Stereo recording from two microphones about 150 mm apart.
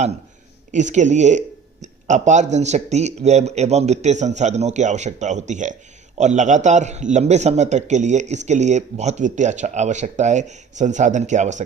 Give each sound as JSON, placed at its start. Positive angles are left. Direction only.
{"t": 0.7, "sound": "a man's voice", "side_deg": -55}